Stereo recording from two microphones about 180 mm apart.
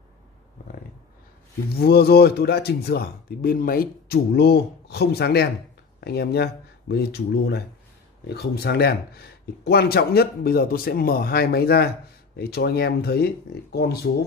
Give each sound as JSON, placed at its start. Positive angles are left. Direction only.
{"t": 1.8, "sound": "speech", "side_deg": 60}